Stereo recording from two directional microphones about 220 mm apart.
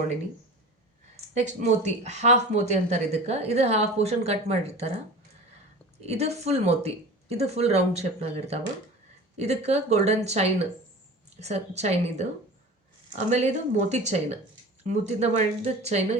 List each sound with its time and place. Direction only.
1.3 s speech: 30° right (ahead or behind)
6.0 s speech: 30° right (ahead or behind)